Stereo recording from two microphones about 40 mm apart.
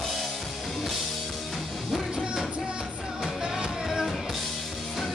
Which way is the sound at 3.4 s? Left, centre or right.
Centre.